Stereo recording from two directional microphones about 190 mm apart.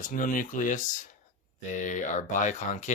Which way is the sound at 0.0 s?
45° left (ahead or behind).